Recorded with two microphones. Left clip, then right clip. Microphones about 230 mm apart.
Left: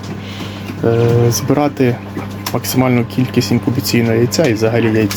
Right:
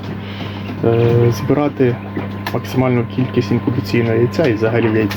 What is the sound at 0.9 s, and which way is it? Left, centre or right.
Speech, left.